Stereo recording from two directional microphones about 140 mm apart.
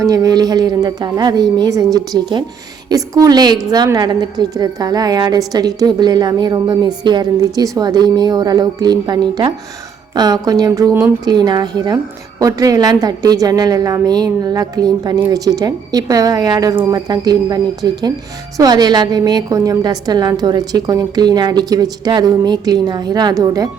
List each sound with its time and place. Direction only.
0.0 s a woman's voice: 25° right (ahead or behind)